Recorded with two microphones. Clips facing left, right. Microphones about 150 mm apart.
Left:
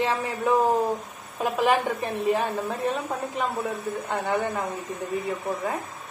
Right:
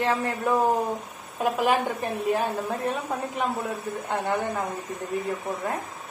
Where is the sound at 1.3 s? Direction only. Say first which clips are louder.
Even; centre (ahead or behind).